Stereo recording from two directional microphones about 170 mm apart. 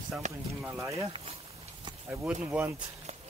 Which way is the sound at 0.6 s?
15° right (ahead or behind).